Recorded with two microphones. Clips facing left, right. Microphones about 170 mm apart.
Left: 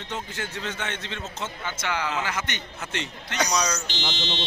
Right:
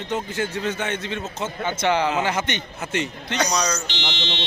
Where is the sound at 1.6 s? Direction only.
25° right (ahead or behind).